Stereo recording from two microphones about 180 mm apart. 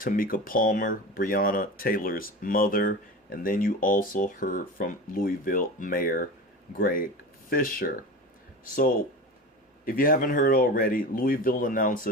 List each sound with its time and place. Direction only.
0.0 s speech: 50° left (ahead or behind)
9.8 s speech: 50° left (ahead or behind)